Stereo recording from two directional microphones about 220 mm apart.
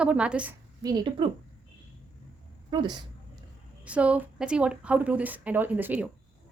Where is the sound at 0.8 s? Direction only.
20° right (ahead or behind).